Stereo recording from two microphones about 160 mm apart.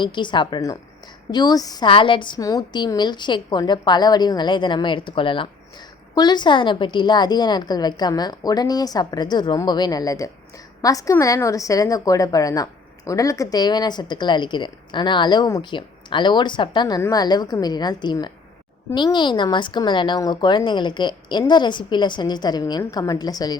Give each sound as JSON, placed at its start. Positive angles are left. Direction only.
{"t": 0.0, "sound": "a woman's voice", "side_deg": 30}